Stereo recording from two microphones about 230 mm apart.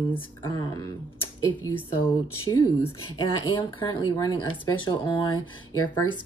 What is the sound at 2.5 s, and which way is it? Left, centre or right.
Speech, centre.